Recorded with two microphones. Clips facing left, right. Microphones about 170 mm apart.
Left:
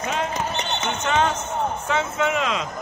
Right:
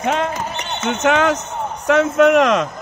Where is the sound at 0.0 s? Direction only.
65° right (ahead or behind).